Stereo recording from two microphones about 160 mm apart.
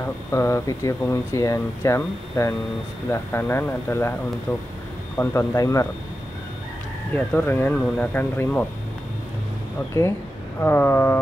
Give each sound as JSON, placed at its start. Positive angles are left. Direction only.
{"t": 0.0, "sound": "speech", "side_deg": 15}
{"t": 7.2, "sound": "speech", "side_deg": 10}
{"t": 10.6, "sound": "speech", "side_deg": 15}